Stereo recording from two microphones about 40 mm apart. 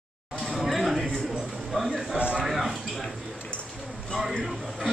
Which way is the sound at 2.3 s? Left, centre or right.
Centre.